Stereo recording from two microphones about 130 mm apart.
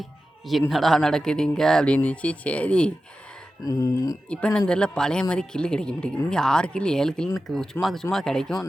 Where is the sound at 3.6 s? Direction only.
25° left (ahead or behind).